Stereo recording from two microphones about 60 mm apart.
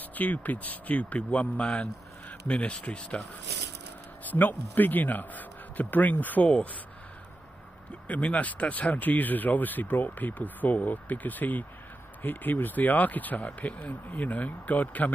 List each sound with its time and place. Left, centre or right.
0.1 s speech: left
4.2 s speech: left
8.1 s speech: left